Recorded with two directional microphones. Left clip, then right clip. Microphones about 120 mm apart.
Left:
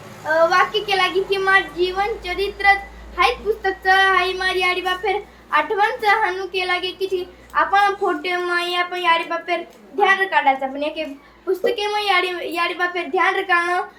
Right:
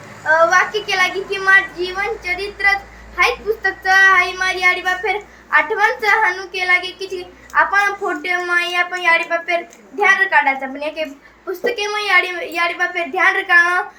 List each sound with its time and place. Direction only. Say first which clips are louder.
0.3 s a child's voice: right 2 dB; 15° left (ahead or behind)